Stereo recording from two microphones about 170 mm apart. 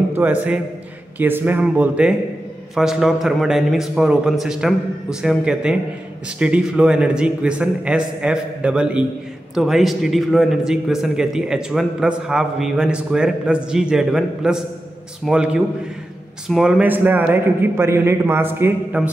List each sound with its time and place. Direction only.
0.1 s a man's voice: 10° right (ahead or behind)